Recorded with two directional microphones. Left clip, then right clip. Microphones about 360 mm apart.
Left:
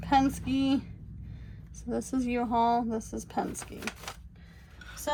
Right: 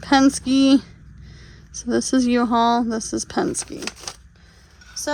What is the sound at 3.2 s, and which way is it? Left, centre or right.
Speech, right.